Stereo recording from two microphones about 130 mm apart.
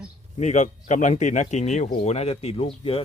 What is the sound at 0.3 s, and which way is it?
Speech, 65° left (ahead or behind).